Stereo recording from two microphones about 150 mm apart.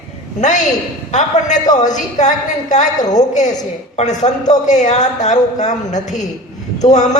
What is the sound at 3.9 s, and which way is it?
A man's voice, 50° left (ahead or behind).